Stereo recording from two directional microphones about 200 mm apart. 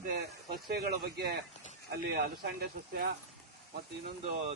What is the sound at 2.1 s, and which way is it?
Speech, 50° right (ahead or behind).